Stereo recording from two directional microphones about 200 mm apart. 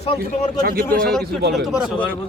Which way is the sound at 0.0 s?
30° left (ahead or behind).